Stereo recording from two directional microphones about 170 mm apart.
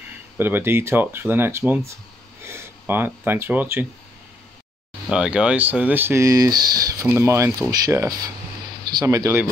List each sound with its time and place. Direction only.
0.4 s speech: 15° right (ahead or behind)
5.1 s speech: 5° right (ahead or behind)